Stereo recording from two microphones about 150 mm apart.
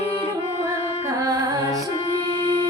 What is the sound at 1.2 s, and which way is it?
Music, 25° right (ahead or behind).